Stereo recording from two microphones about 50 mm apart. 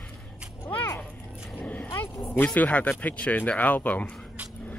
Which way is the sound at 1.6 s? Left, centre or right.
Left.